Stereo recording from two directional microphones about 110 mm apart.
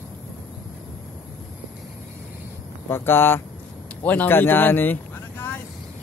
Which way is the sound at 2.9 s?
20° left (ahead or behind).